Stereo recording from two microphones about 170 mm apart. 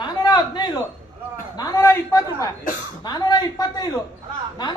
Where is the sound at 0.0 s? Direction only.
25° left (ahead or behind).